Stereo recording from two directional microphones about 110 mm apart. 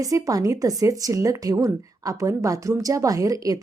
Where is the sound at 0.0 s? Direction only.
30° right (ahead or behind).